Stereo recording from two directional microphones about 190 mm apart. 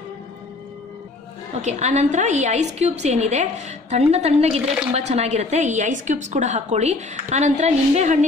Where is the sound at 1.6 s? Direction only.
35° right (ahead or behind).